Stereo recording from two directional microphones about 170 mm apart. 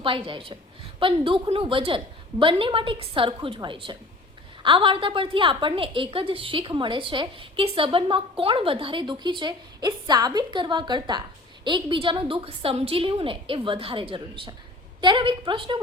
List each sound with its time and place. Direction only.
0.0 s a woman's voice: 30° right (ahead or behind)